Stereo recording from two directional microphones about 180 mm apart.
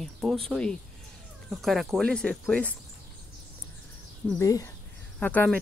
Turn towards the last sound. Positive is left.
turn(degrees=10)  # may be behind; listen again after turning